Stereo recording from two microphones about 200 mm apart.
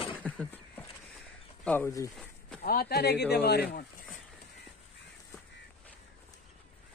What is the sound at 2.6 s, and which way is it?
Speech, 45° left (ahead or behind).